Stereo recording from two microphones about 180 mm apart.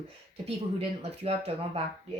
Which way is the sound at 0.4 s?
35° right (ahead or behind).